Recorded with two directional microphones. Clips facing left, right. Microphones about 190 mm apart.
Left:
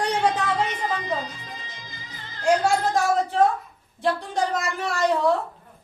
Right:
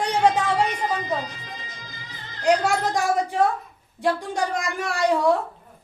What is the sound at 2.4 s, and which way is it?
Speech, 15° right (ahead or behind).